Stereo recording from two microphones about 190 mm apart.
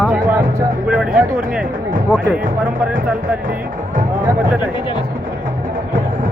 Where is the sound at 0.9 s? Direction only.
5° right (ahead or behind).